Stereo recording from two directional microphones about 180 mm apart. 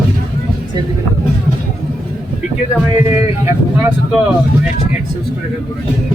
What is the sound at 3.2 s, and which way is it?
Speech, 10° right (ahead or behind).